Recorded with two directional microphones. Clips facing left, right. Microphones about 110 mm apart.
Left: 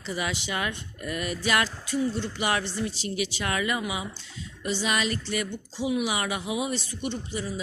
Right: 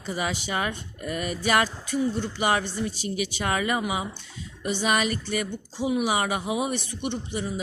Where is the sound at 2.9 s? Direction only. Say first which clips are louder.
Right 1 dB; 50° right (ahead or behind).